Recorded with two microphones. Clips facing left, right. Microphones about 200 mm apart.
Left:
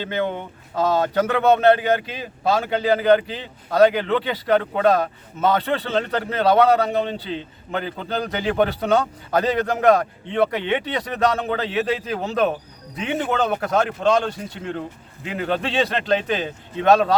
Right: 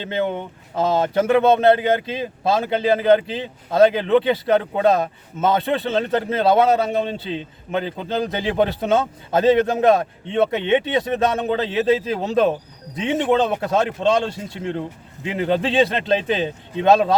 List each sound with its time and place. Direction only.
0.0 s speech: 20° right (ahead or behind)